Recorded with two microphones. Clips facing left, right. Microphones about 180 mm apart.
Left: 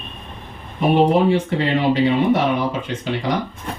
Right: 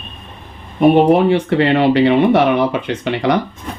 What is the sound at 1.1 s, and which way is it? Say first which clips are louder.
Speech: right 4 dB; 70° right (ahead or behind).